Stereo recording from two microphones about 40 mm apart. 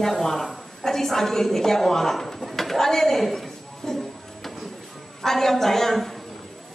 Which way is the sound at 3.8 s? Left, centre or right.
Centre.